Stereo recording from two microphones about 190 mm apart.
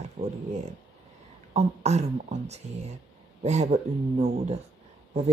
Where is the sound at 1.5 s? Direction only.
35° right (ahead or behind).